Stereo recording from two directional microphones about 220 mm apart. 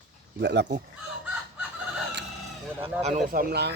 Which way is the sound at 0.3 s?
50° right (ahead or behind).